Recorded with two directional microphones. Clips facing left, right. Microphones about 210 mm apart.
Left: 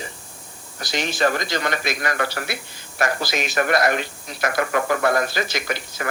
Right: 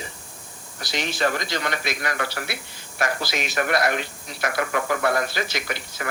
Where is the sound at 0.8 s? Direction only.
45° left (ahead or behind).